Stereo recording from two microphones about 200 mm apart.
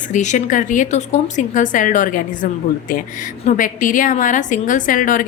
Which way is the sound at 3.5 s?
40° left (ahead or behind).